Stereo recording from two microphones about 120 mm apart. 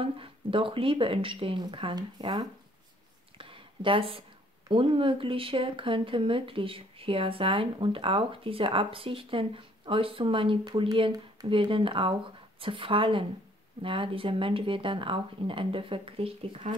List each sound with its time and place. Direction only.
0.0 s speech: 45° right (ahead or behind)
3.3 s a sound: 45° right (ahead or behind)
4.6 s speech: 45° right (ahead or behind)